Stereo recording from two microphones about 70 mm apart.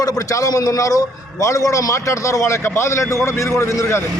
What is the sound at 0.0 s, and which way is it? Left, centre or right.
A man's voice, left.